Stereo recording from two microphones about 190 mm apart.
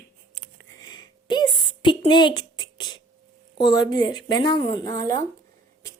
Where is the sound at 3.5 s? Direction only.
20° left (ahead or behind).